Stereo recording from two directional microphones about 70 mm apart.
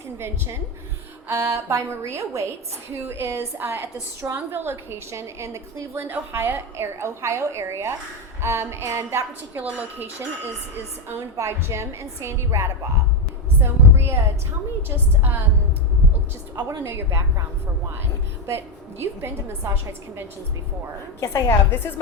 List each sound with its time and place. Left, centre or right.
0.2 s a woman's voice: right
9.6 s speech: right
11.3 s a woman's voice: right
13.6 s a sound: right
14.8 s a woman's voice: right
16.6 s a woman's voice: right
18.4 s a woman's voice: right
21.4 s a woman's voice: left